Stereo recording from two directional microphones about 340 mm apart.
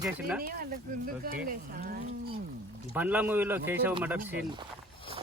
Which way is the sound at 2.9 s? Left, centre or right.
Centre.